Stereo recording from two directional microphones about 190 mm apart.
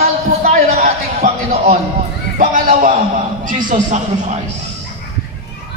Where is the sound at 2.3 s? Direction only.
45° right (ahead or behind).